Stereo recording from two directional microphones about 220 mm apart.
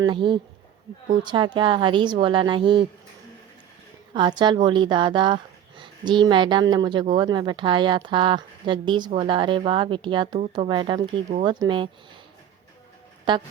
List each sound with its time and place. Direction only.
0.0 s speech: 20° right (ahead or behind)
4.1 s speech: 20° right (ahead or behind)
13.3 s speech: 20° right (ahead or behind)